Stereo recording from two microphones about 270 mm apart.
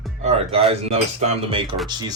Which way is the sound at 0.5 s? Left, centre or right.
Right.